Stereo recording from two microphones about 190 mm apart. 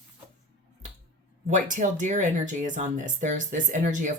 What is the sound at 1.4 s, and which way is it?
Speech, 40° right (ahead or behind).